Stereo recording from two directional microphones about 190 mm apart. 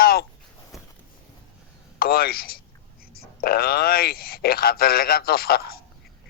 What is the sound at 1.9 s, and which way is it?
A man's voice, 55° left (ahead or behind).